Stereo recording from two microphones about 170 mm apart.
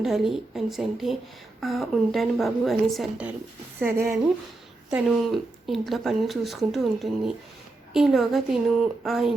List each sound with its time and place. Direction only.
0.0 s speech: centre (ahead or behind)
3.8 s a woman's voice: 15° right (ahead or behind)
4.9 s speech: 5° right (ahead or behind)